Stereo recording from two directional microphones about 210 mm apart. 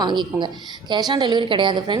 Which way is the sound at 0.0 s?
20° right (ahead or behind).